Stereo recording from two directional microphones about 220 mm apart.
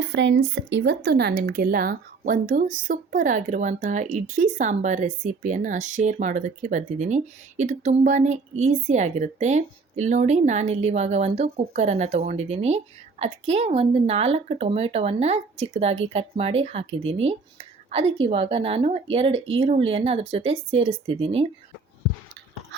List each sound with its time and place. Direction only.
0.0 s speech: 55° right (ahead or behind); by 21.4 s 25° right (ahead or behind)